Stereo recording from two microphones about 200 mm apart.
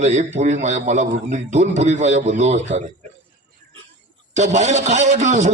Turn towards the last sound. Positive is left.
turn(degrees=-35)  # may be behind; listen again after turning